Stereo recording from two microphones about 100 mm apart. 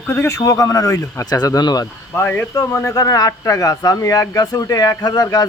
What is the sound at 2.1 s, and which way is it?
Speech, 20° left (ahead or behind).